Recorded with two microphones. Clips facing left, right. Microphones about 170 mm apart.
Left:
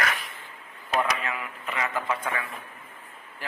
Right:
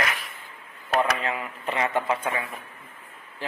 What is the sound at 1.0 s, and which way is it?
A man's voice, 30° right (ahead or behind).